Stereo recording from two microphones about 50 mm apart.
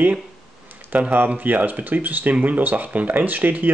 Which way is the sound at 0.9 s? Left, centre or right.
Right.